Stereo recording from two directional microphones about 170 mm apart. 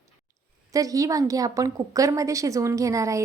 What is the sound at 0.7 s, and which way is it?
A woman's voice, 20° right (ahead or behind).